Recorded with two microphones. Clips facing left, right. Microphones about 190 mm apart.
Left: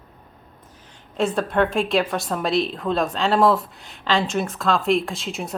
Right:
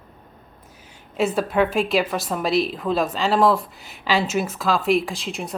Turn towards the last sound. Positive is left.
turn(degrees=0)  # may be behind; listen again after turning